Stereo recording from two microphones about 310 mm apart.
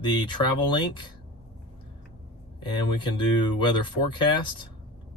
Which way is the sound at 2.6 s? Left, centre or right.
Centre.